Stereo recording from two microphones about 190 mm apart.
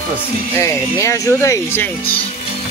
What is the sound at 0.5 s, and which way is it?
Speech, 15° left (ahead or behind).